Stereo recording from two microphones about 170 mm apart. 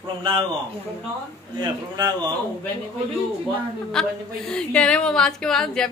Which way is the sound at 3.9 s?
5° left (ahead or behind).